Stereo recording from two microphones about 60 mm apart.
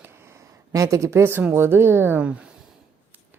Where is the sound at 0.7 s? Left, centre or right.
Right.